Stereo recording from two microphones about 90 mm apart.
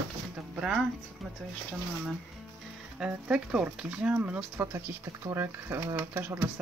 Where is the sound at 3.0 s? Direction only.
10° right (ahead or behind).